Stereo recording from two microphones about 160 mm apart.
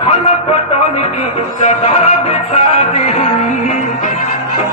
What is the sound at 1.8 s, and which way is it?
Music, 40° left (ahead or behind).